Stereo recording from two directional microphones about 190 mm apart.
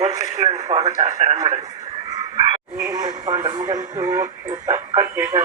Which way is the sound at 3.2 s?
20° right (ahead or behind).